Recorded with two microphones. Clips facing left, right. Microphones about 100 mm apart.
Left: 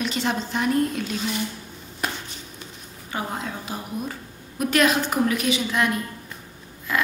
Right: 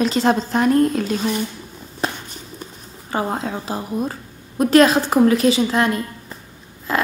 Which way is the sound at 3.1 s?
35° right (ahead or behind).